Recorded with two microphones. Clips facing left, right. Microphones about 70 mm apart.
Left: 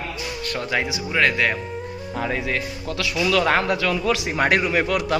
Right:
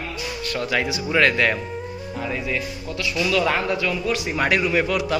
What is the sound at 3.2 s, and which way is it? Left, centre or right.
Speech, left.